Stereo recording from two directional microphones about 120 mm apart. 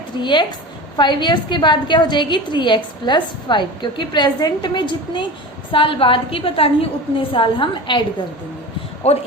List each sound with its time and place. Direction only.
0.2 s a woman's voice: 40° left (ahead or behind)
9.0 s a man's voice: 60° left (ahead or behind)